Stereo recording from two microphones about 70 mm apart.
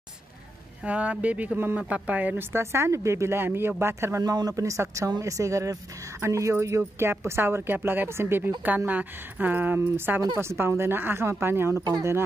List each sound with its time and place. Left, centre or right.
0.8 s speech: centre
2.5 s a woman's voice: right
4.2 s a woman's voice: right
8.6 s speech: right
10.3 s a woman's voice: right